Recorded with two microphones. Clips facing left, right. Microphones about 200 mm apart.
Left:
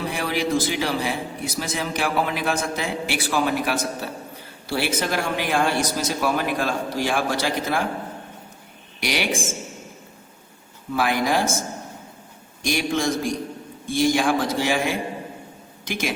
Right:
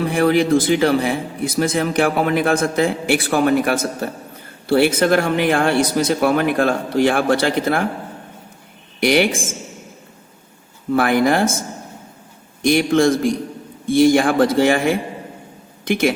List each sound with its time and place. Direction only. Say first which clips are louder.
0.0 s a man's voice: right 9 dB; 55° right (ahead or behind)
9.0 s speech: right 10 dB; 55° right (ahead or behind)
10.9 s speech: right 6 dB; 55° right (ahead or behind)
12.6 s speech: right 9 dB; 55° right (ahead or behind)